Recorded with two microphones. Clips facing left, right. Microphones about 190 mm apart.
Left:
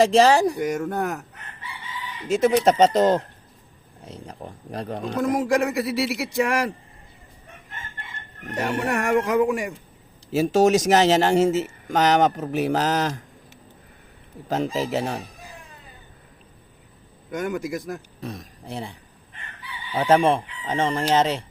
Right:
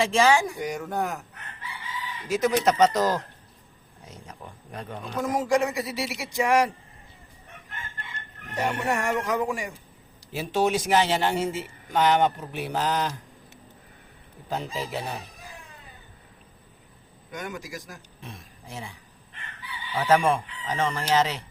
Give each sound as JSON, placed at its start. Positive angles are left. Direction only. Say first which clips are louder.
{"t": 0.0, "sound": "speech", "louder": "left 5 dB", "side_deg": 40}
{"t": 0.6, "sound": "speech", "louder": "left 4 dB", "side_deg": 50}
{"t": 2.2, "sound": "speech", "louder": "left 5 dB", "side_deg": 25}
{"t": 5.3, "sound": "speech", "louder": "left 1 dB", "side_deg": 60}
{"t": 8.6, "sound": "speech", "louder": "left 2 dB", "side_deg": 70}
{"t": 10.3, "sound": "speech", "louder": "left 7 dB", "side_deg": 45}
{"t": 14.6, "sound": "speech", "louder": "left 8 dB", "side_deg": 90}
{"t": 17.5, "sound": "speech", "louder": "left 10 dB", "side_deg": 55}
{"t": 18.2, "sound": "speech", "louder": "left 9 dB", "side_deg": 40}